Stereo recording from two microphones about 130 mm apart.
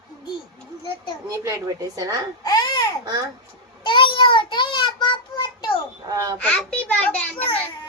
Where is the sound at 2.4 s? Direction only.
30° left (ahead or behind).